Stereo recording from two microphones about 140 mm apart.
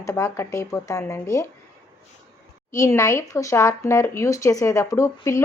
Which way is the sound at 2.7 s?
20° left (ahead or behind).